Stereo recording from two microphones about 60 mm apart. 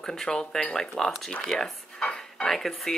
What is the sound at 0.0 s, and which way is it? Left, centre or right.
Speech, centre.